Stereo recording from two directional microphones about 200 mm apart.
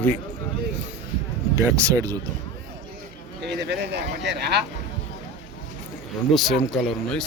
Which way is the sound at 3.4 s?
55° right (ahead or behind).